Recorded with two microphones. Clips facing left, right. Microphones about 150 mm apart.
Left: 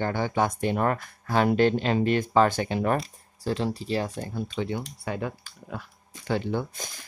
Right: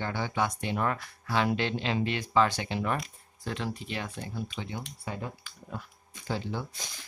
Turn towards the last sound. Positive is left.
turn(degrees=55)  # may be behind; listen again after turning